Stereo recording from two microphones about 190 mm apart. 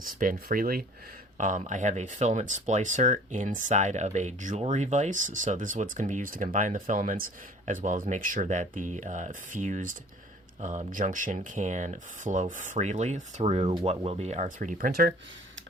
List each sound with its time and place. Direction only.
0.0 s speech: 45° right (ahead or behind)
13.7 s speech: 25° right (ahead or behind); by 15.1 s 50° right (ahead or behind)